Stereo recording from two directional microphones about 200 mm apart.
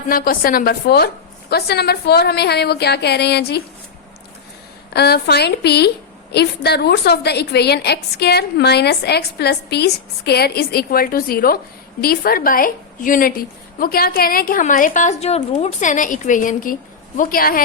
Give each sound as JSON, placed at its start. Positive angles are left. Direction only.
{"t": 0.1, "sound": "a woman's voice", "side_deg": 45}
{"t": 4.9, "sound": "a woman's voice", "side_deg": 55}